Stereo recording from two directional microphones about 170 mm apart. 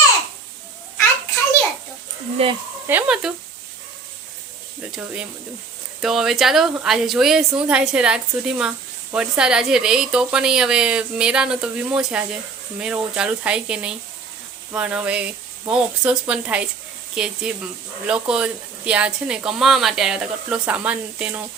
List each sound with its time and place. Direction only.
2.4 s speech: 35° right (ahead or behind)
2.8 s speech: 10° right (ahead or behind)
6.0 s a woman's voice: centre (ahead or behind)